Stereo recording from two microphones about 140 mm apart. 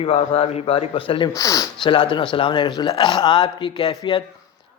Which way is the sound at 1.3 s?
25° left (ahead or behind).